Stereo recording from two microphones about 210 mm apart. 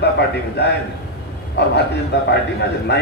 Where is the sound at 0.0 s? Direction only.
55° left (ahead or behind).